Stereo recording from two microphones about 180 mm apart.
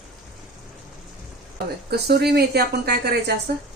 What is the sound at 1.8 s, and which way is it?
A woman's voice, 65° right (ahead or behind).